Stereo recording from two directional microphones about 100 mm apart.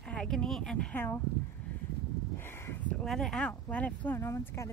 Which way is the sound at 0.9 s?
20° left (ahead or behind).